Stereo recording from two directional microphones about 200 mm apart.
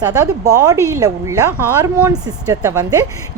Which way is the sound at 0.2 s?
15° right (ahead or behind).